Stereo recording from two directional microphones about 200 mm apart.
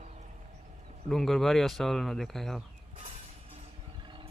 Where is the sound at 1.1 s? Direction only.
Centre (ahead or behind).